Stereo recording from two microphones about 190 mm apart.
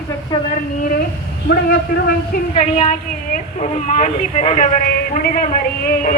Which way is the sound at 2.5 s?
40° left (ahead or behind).